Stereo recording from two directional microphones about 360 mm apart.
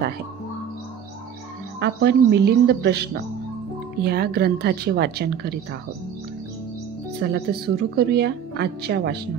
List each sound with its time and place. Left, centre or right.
1.8 s speech: right
7.2 s speech: right